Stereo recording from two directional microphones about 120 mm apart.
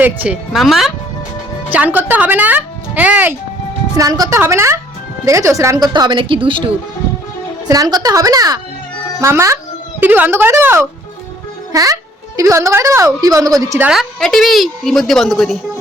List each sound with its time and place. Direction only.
0.0 s speech: 15° right (ahead or behind)
0.5 s a woman's voice: centre (ahead or behind)
1.7 s speech: 15° right (ahead or behind)
3.9 s a woman's voice: 30° right (ahead or behind)
5.9 s speech: 40° right (ahead or behind)
7.7 s a woman's voice: 30° right (ahead or behind)
13.9 s a woman's voice: centre (ahead or behind)